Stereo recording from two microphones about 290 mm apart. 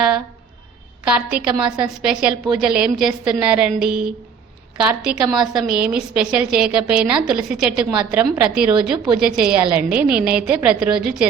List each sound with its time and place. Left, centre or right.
1.4 s a woman's voice: centre
8.7 s a woman's voice: centre
9.1 s a woman's voice: centre